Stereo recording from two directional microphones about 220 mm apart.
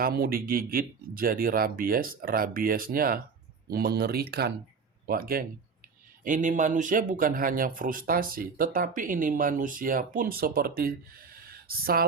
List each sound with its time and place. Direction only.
0.0 s speech: 40° right (ahead or behind)